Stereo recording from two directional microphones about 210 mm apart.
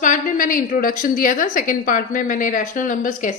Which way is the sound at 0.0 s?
40° left (ahead or behind).